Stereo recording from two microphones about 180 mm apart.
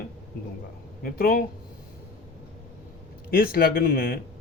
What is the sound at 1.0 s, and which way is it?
Speech, 55° left (ahead or behind).